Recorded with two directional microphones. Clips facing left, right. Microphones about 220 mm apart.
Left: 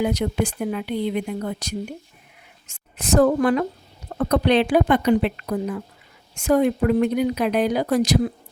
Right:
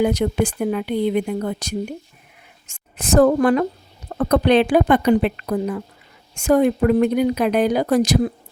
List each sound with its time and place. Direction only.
0.0 s a woman's voice: 50° right (ahead or behind)